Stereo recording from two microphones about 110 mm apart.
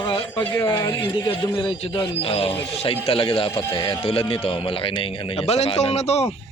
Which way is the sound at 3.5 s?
25° left (ahead or behind).